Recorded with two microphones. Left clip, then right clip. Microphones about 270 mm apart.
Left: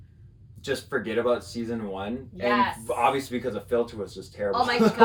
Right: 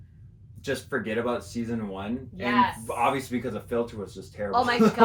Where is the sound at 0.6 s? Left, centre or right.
Centre.